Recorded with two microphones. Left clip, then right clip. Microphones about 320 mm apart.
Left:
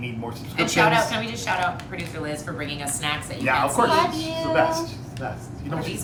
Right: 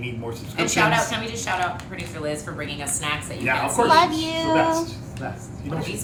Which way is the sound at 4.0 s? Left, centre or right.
Right.